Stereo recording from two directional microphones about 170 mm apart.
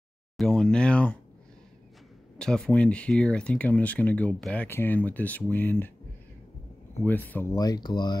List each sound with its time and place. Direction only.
0.4 s speech: 5° left (ahead or behind)
2.3 s speech: 5° left (ahead or behind)
7.0 s speech: 10° left (ahead or behind)
7.5 s speech: 20° left (ahead or behind)